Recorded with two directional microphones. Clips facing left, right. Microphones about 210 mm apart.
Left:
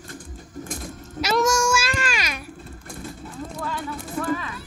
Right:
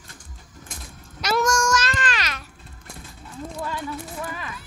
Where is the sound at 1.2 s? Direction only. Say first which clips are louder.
Left 1 dB; 5° left (ahead or behind).